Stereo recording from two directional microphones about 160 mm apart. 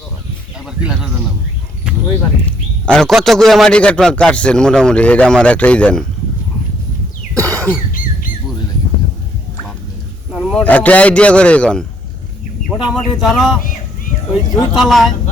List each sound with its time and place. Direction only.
0.9 s a man's voice: 5° right (ahead or behind)
2.8 s a man's voice: 5° left (ahead or behind)
7.3 s sneeze: 20° right (ahead or behind)
10.3 s a man's voice: 5° left (ahead or behind)
14.3 s speech: 25° left (ahead or behind)
14.8 s a man's voice: centre (ahead or behind)